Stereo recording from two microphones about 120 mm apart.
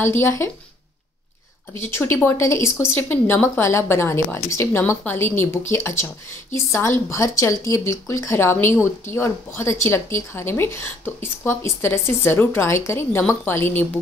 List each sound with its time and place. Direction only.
0.0 s speech: 20° left (ahead or behind)
1.7 s speech: 20° left (ahead or behind)